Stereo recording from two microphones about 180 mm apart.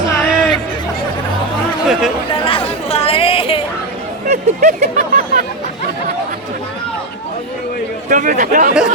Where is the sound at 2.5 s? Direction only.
30° left (ahead or behind).